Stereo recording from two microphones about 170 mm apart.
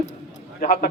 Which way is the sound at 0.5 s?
65° left (ahead or behind).